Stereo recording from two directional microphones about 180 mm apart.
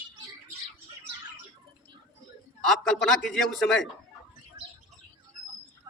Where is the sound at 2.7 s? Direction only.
Centre (ahead or behind).